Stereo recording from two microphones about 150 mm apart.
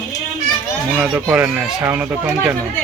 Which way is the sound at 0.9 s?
10° right (ahead or behind).